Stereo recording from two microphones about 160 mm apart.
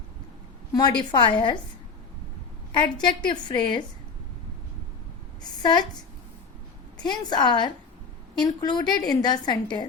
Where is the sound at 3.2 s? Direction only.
30° left (ahead or behind).